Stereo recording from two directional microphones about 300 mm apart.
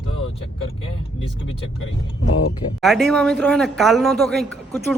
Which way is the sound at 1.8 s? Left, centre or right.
Left.